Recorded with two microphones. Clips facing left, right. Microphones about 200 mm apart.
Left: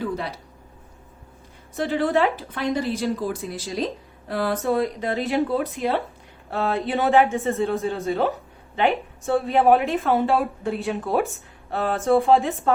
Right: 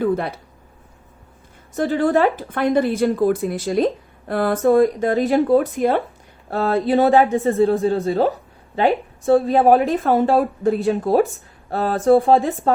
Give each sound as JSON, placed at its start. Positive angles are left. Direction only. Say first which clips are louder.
{"t": 0.0, "sound": "speech", "louder": "right 7 dB", "side_deg": -55}
{"t": 1.7, "sound": "speech", "louder": "right 4 dB", "side_deg": -45}
{"t": 6.5, "sound": "a woman's voice", "louder": "right 6 dB", "side_deg": -35}